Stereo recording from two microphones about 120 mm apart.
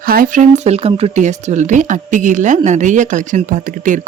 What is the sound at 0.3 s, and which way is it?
Speech, 85° right.